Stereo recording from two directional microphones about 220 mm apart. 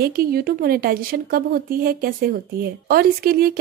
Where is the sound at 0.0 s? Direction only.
45° right (ahead or behind).